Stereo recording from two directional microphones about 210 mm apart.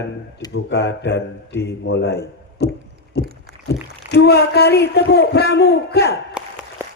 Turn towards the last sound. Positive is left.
turn(degrees=-5)  # may be behind; listen again after turning